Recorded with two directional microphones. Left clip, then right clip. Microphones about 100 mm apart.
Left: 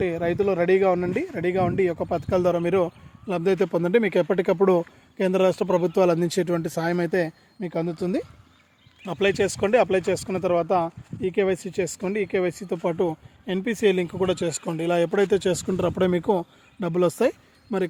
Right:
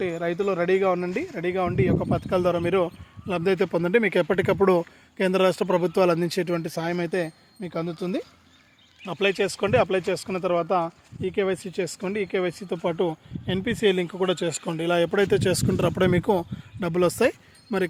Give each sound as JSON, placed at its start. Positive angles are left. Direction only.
{"t": 0.0, "sound": "speech", "side_deg": 35}
{"t": 4.2, "sound": "speech", "side_deg": 5}
{"t": 6.1, "sound": "speech", "side_deg": 30}
{"t": 9.0, "sound": "speech", "side_deg": 30}